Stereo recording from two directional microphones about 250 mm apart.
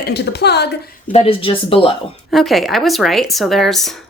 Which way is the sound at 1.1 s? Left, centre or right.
Left.